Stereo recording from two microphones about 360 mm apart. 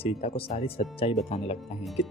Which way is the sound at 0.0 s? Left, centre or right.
Centre.